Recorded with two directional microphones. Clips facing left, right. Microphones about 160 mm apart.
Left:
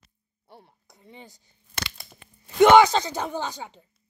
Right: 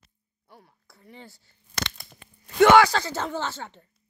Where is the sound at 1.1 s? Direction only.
20° left (ahead or behind).